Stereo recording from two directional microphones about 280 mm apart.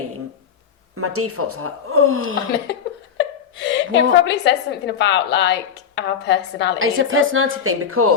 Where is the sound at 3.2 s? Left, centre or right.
Left.